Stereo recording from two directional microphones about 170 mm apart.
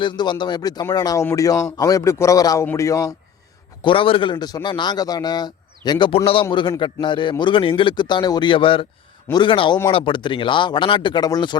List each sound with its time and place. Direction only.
0.0 s a man's voice: 25° left (ahead or behind)
3.8 s a man's voice: 30° left (ahead or behind)